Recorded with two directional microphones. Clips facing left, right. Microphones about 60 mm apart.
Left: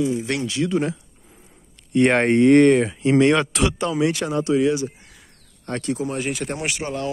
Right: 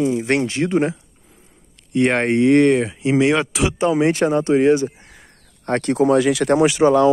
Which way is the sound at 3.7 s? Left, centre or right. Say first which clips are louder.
Right 5 dB; right.